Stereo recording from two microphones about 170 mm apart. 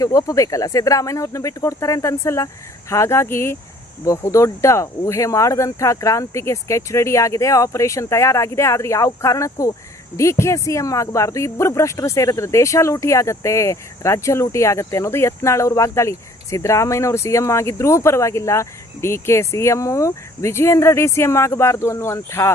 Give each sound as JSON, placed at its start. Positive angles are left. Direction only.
{"t": 0.0, "sound": "speech", "side_deg": 20}